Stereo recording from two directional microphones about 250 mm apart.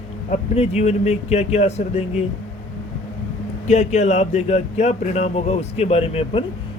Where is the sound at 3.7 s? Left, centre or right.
Left.